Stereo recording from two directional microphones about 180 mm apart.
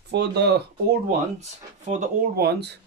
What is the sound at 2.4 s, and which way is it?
Speech, 65° right (ahead or behind).